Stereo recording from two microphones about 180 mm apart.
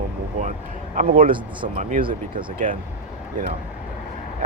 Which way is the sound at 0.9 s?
45° right (ahead or behind).